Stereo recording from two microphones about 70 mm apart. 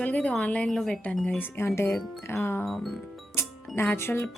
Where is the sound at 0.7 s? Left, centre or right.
Centre.